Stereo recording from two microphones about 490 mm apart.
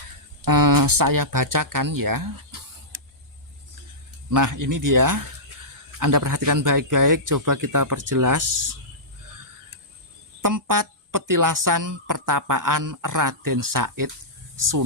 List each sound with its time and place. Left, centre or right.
0.4 s speech: right
4.3 s speech: right
10.4 s speech: right